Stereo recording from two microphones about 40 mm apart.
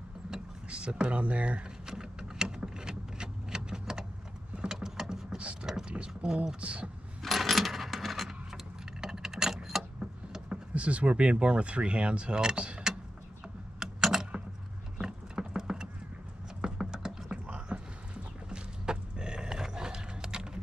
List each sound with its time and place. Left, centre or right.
0.7 s speech: right
1.9 s vehicle: centre
5.4 s vehicle: right
5.9 s mechanisms: right
6.6 s speech: right
7.2 s coin: centre
9.0 s keys jangling: centre
9.9 s a sound: right
10.7 s speech: right
13.7 s computer keyboard: centre
15.0 s clip-clop: centre
16.6 s a sound: centre